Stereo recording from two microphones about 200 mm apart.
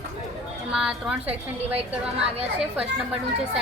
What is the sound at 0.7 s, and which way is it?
Speech, centre (ahead or behind).